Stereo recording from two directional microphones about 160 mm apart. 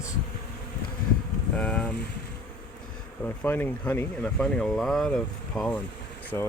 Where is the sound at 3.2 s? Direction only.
10° left (ahead or behind).